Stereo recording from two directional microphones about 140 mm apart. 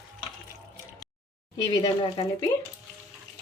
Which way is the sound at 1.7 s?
35° left (ahead or behind).